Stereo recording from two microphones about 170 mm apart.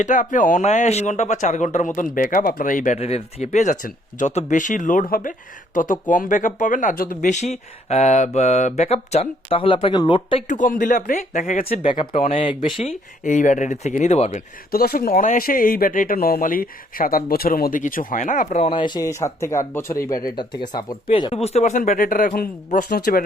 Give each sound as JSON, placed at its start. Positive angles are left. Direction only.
{"t": 0.0, "sound": "speech", "side_deg": 50}
{"t": 10.5, "sound": "speech", "side_deg": 50}
{"t": 11.6, "sound": "speech", "side_deg": 35}
{"t": 12.8, "sound": "speech", "side_deg": 45}
{"t": 14.7, "sound": "speech", "side_deg": 60}
{"t": 18.7, "sound": "speech", "side_deg": 30}
{"t": 22.9, "sound": "speech", "side_deg": 65}